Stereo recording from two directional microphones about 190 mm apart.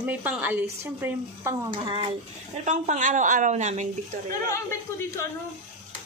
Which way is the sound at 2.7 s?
40° right (ahead or behind).